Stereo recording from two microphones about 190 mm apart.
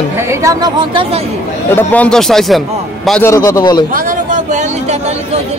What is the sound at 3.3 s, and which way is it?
Speech, 15° left (ahead or behind).